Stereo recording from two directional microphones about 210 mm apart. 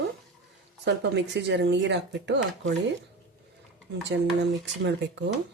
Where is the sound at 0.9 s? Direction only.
55° right (ahead or behind).